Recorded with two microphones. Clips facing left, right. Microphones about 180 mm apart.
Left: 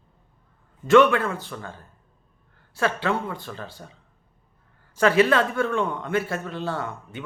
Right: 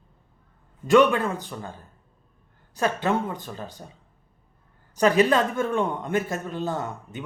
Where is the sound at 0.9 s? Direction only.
15° right (ahead or behind).